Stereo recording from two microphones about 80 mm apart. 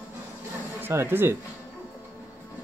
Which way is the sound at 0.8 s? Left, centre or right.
Right.